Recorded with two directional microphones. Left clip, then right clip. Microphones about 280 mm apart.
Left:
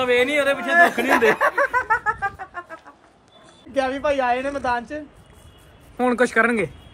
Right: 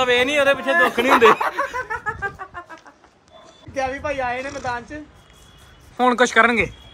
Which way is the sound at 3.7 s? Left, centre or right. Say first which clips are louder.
Left 3 dB; left.